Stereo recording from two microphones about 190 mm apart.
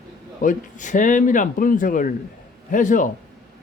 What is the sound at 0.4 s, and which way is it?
Speech, 40° left (ahead or behind).